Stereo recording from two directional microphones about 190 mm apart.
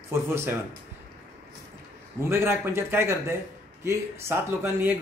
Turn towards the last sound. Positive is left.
turn(degrees=-10)  # may be behind; listen again after turning